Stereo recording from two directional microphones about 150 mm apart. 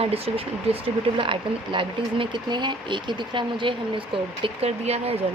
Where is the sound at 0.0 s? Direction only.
40° right (ahead or behind).